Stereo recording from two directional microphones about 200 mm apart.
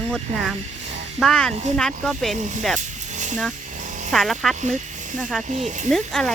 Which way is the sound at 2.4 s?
35° right (ahead or behind).